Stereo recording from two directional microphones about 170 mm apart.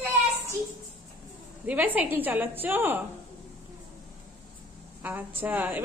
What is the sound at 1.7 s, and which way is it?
A woman's voice, 10° right (ahead or behind).